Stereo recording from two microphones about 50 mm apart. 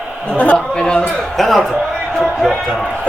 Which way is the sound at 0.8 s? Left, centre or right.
Centre.